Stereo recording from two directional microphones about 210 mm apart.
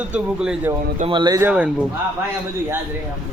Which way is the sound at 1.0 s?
25° right (ahead or behind).